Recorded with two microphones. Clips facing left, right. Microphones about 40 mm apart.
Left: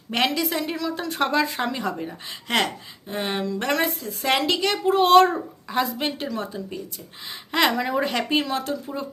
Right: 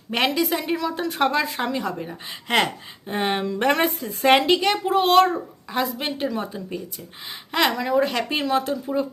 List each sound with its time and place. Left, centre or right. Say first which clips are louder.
0.1 s a woman's voice: right 1 dB; centre
3.1 s speech: right 3 dB; right
4.5 s a child's voice: right 1 dB; centre